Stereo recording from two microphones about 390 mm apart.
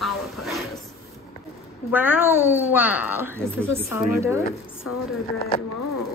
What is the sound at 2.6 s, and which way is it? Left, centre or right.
A woman's voice, centre.